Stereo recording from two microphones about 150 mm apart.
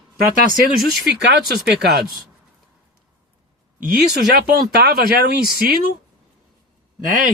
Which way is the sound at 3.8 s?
65° right (ahead or behind).